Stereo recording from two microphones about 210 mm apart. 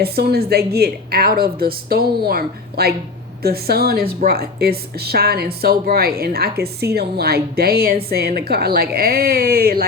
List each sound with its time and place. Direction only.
0.0 s a woman's voice: 45° right (ahead or behind)